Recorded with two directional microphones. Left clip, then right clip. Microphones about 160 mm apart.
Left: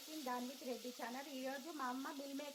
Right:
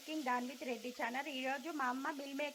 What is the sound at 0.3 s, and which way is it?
Speech, 15° right (ahead or behind).